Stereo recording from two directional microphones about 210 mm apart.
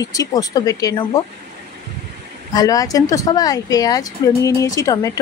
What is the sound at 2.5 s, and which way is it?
Speech, 15° left (ahead or behind).